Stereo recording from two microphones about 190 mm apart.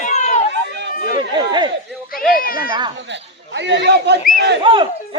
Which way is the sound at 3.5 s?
65° right (ahead or behind).